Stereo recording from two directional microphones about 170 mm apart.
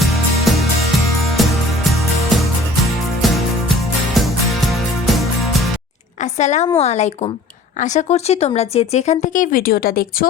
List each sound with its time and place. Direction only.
0.5 s music: centre (ahead or behind)
3.2 s music: centre (ahead or behind)
6.4 s speech: 45° left (ahead or behind); by 10.2 s 60° left (ahead or behind)